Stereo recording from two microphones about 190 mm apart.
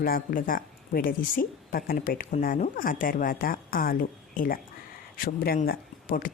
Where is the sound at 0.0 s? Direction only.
50° left (ahead or behind).